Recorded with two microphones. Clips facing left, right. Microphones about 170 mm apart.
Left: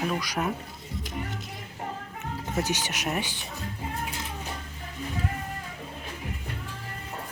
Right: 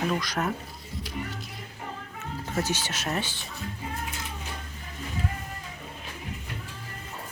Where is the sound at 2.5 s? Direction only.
15° left (ahead or behind).